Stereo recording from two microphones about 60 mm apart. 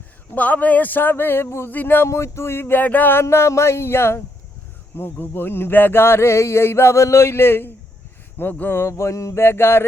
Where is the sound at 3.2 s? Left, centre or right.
Left.